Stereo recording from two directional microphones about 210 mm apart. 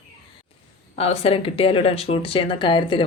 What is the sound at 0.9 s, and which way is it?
A woman's voice, 30° left (ahead or behind).